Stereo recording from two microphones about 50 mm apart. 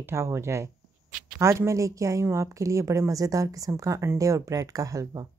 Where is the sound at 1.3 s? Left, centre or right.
Right.